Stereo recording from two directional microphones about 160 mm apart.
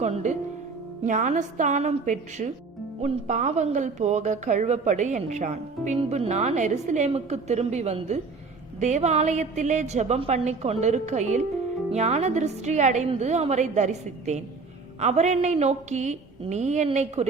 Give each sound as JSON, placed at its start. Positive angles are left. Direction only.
{"t": 0.0, "sound": "a woman's voice", "side_deg": -45}